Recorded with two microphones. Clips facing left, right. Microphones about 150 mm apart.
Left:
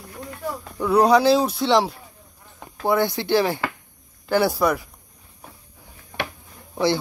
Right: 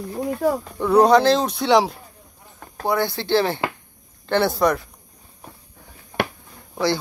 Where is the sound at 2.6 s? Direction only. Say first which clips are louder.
Left 1 dB; 20° left (ahead or behind).